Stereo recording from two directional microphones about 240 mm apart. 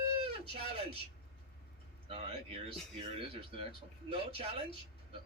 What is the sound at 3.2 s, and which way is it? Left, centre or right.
Speech, right.